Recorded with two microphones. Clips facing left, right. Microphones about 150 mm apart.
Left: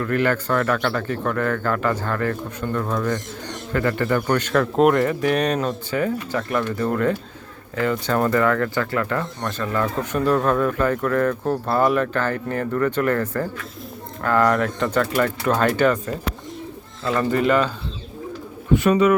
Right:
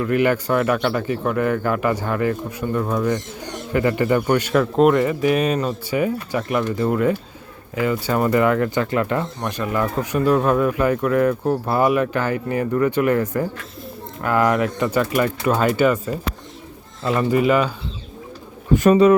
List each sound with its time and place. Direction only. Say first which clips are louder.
0.0 s speech: right 3 dB; 15° right (ahead or behind)
18.7 s speech: right 3 dB; 40° right (ahead or behind)